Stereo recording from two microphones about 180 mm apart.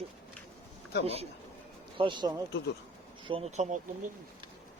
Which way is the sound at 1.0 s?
35° right (ahead or behind).